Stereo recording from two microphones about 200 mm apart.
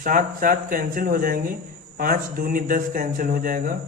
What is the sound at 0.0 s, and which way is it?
Speech, 45° right (ahead or behind).